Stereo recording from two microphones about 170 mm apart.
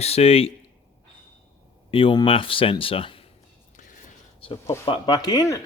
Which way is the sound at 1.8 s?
30° left (ahead or behind).